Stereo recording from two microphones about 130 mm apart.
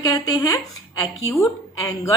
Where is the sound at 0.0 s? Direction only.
30° left (ahead or behind).